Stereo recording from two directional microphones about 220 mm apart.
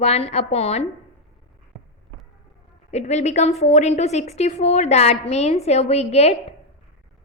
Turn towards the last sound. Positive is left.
turn(degrees=30)  # may be behind; listen again after turning